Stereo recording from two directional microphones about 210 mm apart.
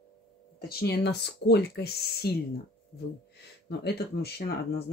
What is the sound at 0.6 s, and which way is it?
Speech, 45° left (ahead or behind).